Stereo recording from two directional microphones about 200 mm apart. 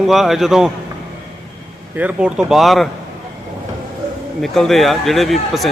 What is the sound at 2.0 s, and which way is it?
Speech, 5° right (ahead or behind).